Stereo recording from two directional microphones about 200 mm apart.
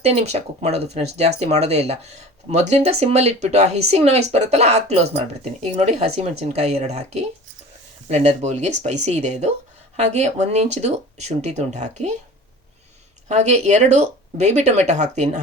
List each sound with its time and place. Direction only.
0.0 s speech: 30° right (ahead or behind)
13.2 s speech: 35° right (ahead or behind)